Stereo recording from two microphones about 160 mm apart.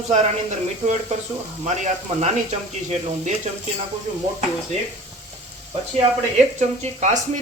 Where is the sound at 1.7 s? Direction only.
45° right (ahead or behind).